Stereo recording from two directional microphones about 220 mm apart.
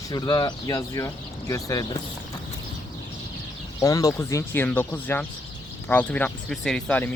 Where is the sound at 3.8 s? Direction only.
15° left (ahead or behind).